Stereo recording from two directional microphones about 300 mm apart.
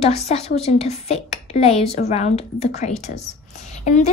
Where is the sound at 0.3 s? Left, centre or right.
Left.